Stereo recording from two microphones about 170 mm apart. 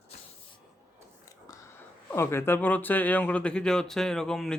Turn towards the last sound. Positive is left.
turn(degrees=5)  # may be behind; listen again after turning